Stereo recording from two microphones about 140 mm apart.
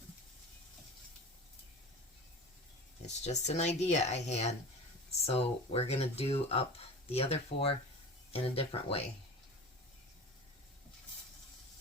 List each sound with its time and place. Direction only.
3.1 s speech: 55° left (ahead or behind)